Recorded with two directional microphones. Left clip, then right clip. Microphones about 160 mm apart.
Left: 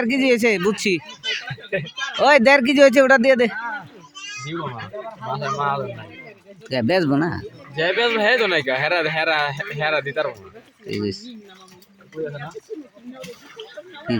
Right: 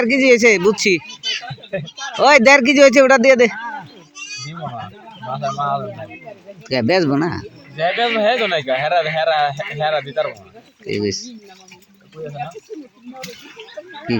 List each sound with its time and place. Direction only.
0.0 s speech: 15° left (ahead or behind)
2.1 s speech: 15° left (ahead or behind)
5.3 s speech: 55° left (ahead or behind)
6.7 s speech: 15° left (ahead or behind)
7.8 s speech: 55° left (ahead or behind)
10.8 s speech: 15° left (ahead or behind)